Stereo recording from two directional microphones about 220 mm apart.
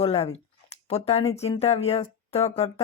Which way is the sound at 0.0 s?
25° left (ahead or behind).